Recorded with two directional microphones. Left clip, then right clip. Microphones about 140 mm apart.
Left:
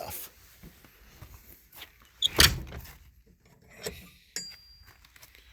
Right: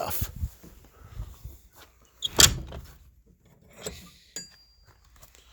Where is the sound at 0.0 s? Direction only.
80° right.